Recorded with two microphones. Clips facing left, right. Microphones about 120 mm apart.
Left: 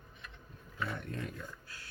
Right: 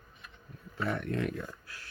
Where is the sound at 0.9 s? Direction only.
70° right (ahead or behind).